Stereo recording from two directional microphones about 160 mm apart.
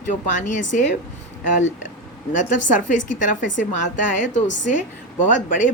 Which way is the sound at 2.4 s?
55° left (ahead or behind).